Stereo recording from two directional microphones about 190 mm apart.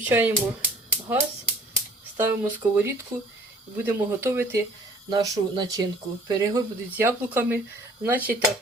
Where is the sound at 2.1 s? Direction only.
10° right (ahead or behind).